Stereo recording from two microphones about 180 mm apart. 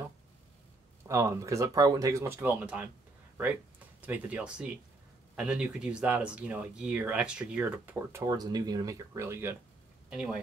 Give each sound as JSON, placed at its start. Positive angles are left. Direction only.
{"t": 1.0, "sound": "speech", "side_deg": -15}
{"t": 4.0, "sound": "speech", "side_deg": -10}